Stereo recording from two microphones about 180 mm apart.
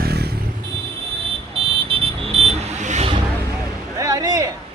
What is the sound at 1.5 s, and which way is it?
Vehicle, 30° right (ahead or behind).